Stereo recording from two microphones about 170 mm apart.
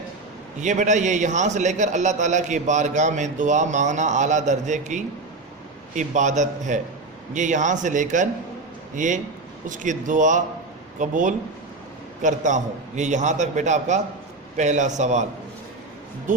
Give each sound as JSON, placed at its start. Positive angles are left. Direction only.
{"t": 0.6, "sound": "a man's voice", "side_deg": -45}